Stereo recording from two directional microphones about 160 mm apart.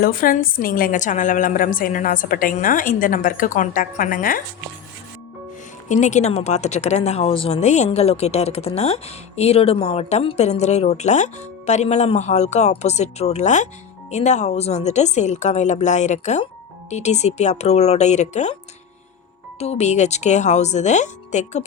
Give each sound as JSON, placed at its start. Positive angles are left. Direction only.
{"t": 0.0, "sound": "a woman's voice", "side_deg": 65}
{"t": 5.9, "sound": "speech", "side_deg": 50}
{"t": 19.5, "sound": "speech", "side_deg": 40}